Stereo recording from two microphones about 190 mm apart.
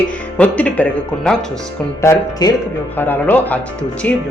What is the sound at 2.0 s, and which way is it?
A woman's voice, 20° left (ahead or behind).